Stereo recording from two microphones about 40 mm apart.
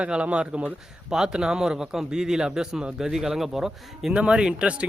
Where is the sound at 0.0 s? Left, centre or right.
Right.